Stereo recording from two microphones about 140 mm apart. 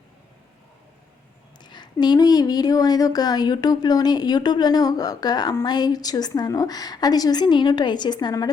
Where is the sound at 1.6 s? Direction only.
30° left (ahead or behind).